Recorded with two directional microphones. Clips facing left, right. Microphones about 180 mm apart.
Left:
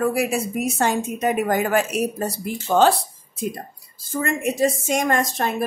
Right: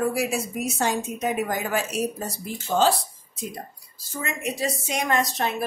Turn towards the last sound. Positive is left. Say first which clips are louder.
# left 3 dB
turn(degrees=50)  # may be behind; listen again after turning